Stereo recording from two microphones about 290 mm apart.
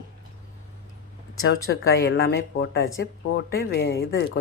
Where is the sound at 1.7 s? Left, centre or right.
Left.